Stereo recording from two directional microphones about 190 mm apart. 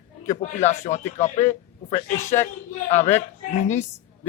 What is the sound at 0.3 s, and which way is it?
A man's voice, 40° left (ahead or behind).